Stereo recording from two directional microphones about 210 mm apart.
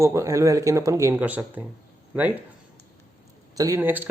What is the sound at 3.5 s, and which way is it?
Speech, 15° right (ahead or behind).